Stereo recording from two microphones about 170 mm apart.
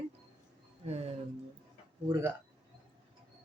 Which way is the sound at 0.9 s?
40° right (ahead or behind).